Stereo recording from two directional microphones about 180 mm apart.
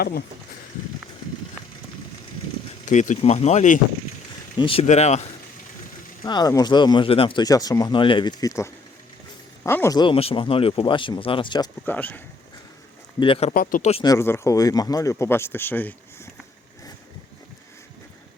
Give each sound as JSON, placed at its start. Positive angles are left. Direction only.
{"t": 2.8, "sound": "speech", "side_deg": 40}
{"t": 4.5, "sound": "speech", "side_deg": 30}
{"t": 6.2, "sound": "speech", "side_deg": 20}
{"t": 10.0, "sound": "speech", "side_deg": 30}
{"t": 11.9, "sound": "speech", "side_deg": 10}
{"t": 13.1, "sound": "speech", "side_deg": 30}
{"t": 13.5, "sound": "speech", "side_deg": 50}
{"t": 13.9, "sound": "speech", "side_deg": 20}